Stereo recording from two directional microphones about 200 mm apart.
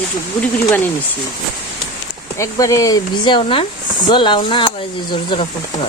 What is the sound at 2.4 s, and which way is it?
Speech, 15° left (ahead or behind).